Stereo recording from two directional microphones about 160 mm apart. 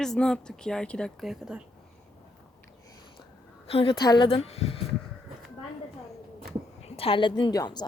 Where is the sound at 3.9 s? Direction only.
25° left (ahead or behind).